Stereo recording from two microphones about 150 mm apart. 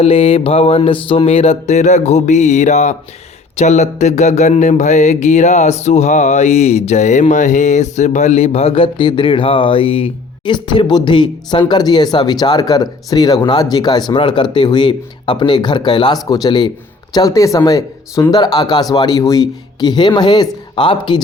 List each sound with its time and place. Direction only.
0.0 s mantra: 40° left (ahead or behind)
17.2 s speech: 20° left (ahead or behind)